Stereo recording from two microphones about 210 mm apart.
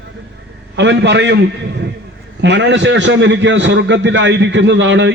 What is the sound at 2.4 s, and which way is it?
A man's voice, 55° right (ahead or behind).